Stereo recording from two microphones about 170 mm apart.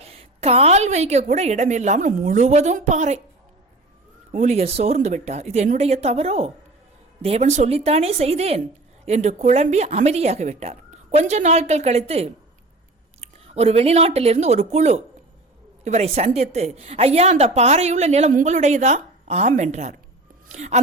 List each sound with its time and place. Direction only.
0.0 s a woman's voice: 35° right (ahead or behind)
4.3 s a woman's voice: 40° right (ahead or behind)